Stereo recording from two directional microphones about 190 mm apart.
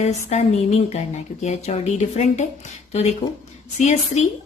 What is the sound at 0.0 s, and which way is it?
Speech, 35° left (ahead or behind).